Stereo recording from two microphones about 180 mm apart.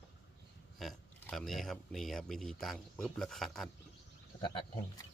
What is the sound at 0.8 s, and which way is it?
Speech, centre (ahead or behind).